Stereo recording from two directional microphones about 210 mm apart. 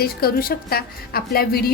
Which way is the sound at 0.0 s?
45° left (ahead or behind).